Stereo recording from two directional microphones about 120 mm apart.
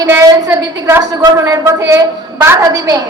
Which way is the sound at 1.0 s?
30° right (ahead or behind).